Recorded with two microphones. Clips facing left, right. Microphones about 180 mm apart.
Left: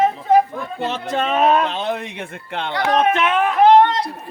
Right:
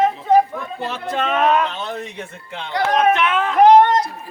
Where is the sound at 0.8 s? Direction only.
20° left (ahead or behind).